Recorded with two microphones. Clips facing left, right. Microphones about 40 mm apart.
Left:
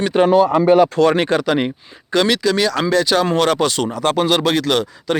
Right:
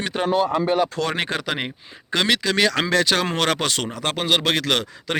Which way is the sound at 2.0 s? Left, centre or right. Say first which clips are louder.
Left 5 dB; right.